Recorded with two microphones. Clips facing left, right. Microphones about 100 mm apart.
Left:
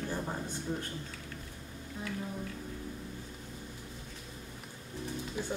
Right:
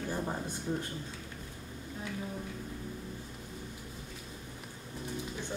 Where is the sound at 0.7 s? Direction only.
5° right (ahead or behind).